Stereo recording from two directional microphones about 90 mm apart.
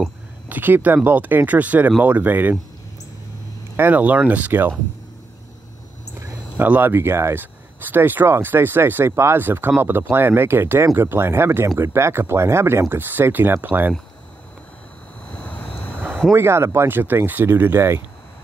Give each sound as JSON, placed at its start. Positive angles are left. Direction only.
{"t": 0.5, "sound": "speech", "side_deg": -20}
{"t": 3.7, "sound": "speech", "side_deg": -20}
{"t": 6.5, "sound": "speech", "side_deg": -20}
{"t": 15.3, "sound": "vehicle", "side_deg": 15}
{"t": 16.3, "sound": "speech", "side_deg": -30}